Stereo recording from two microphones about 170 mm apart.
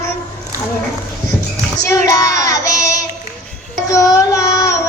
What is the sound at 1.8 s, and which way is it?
Child singing, 20° left (ahead or behind).